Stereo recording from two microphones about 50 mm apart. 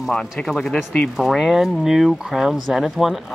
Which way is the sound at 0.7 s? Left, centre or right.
Left.